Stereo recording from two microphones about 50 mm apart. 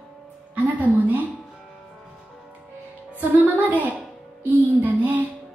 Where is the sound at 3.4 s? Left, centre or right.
Right.